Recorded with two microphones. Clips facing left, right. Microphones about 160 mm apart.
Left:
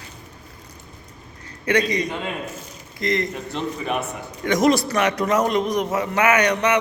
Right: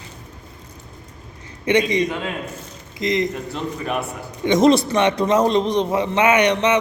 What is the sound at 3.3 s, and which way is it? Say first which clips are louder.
Speech: even; centre (ahead or behind).